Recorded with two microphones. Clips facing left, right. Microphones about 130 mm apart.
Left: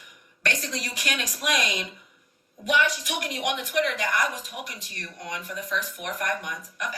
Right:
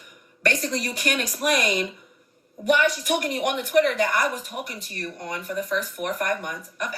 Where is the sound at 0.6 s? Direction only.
55° right (ahead or behind).